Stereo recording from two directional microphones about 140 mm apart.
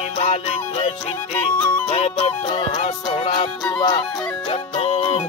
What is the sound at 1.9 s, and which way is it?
Music, 45° left (ahead or behind).